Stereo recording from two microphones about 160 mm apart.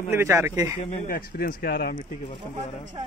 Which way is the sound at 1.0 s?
70° left (ahead or behind).